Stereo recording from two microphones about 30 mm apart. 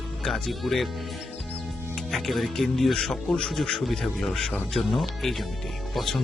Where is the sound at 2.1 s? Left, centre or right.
Centre.